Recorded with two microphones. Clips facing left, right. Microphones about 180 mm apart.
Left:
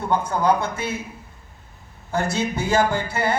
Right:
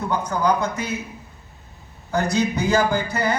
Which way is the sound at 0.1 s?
30° left (ahead or behind).